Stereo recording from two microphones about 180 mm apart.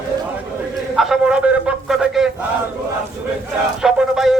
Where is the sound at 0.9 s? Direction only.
Centre (ahead or behind).